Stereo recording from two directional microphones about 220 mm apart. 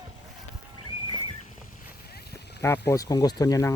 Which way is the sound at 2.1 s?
45° left (ahead or behind).